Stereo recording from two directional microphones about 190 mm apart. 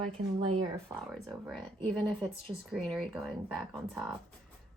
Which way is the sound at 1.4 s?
Centre (ahead or behind).